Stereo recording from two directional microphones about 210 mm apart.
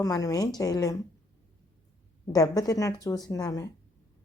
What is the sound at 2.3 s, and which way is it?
A woman's voice, 15° left (ahead or behind).